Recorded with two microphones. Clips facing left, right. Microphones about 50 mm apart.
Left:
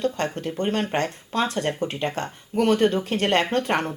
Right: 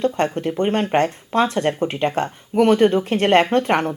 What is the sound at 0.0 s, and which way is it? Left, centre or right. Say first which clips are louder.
Speech: right 5 dB; right.